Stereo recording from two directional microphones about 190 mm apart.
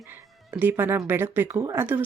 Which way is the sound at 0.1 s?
10° right (ahead or behind).